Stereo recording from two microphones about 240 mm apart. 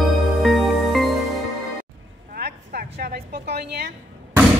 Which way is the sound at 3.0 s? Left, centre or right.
Right.